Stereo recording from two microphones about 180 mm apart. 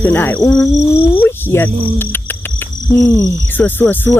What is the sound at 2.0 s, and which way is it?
Cricket, 10° left (ahead or behind).